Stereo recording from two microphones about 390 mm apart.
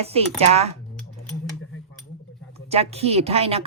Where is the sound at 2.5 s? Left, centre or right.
Centre.